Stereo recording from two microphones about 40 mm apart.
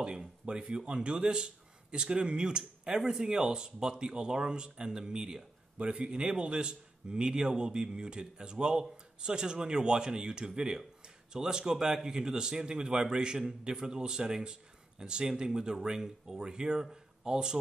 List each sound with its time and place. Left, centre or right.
0.0 s a man's voice: right